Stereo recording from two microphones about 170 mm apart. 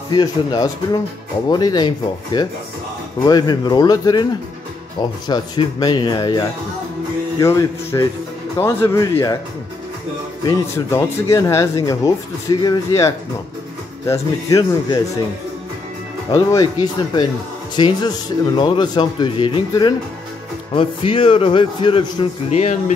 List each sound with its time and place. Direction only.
0.1 s speech: 25° left (ahead or behind)
5.3 s speech: 25° left (ahead or behind)
10.4 s speech: 15° left (ahead or behind)
16.3 s a man's voice: 20° left (ahead or behind); by 22.9 s 40° left (ahead or behind)